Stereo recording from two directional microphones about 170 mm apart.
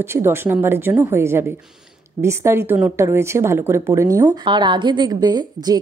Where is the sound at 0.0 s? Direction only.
15° right (ahead or behind).